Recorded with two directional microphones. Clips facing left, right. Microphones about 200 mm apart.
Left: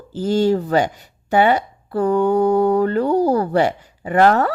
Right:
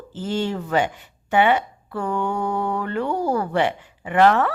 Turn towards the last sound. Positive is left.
turn(degrees=40)  # may be behind; listen again after turning